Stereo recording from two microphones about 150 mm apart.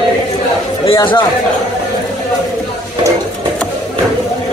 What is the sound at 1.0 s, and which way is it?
Speech, 30° left (ahead or behind).